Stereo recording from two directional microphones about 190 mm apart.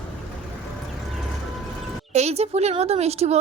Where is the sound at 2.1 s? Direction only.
35° right (ahead or behind).